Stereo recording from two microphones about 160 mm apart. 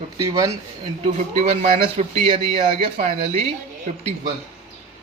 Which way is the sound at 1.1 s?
40° right (ahead or behind).